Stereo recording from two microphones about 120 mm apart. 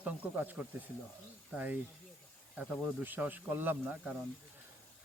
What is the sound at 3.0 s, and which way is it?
Speech, 15° right (ahead or behind).